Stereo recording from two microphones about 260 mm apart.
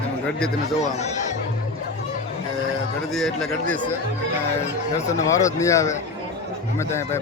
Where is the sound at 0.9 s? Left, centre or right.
Left.